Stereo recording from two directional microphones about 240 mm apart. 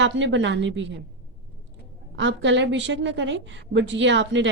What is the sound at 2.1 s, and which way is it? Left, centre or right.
A woman's voice, right.